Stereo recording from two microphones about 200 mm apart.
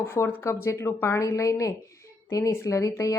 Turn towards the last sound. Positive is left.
turn(degrees=15)  # may be behind; listen again after turning